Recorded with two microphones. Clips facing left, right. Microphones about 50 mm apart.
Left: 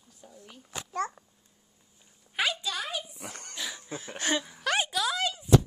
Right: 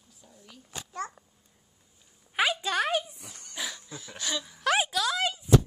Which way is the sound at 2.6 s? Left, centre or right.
Right.